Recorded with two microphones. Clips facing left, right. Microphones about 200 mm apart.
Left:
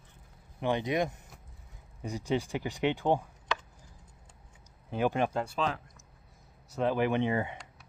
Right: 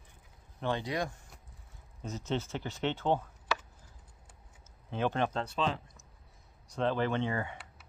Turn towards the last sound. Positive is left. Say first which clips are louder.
# left 4 dB
turn(degrees=20)  # may be behind; listen again after turning